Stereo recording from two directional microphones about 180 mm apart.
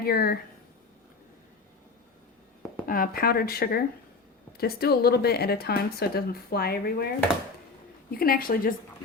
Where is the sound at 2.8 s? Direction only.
50° left (ahead or behind).